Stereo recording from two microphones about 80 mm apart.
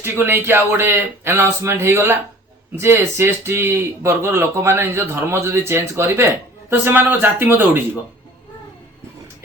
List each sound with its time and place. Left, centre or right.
0.0 s speech: right